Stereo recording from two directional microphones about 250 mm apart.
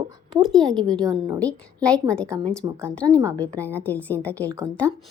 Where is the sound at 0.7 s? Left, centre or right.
Centre.